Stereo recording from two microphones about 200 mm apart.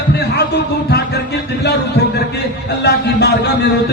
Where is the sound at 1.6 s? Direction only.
55° left (ahead or behind).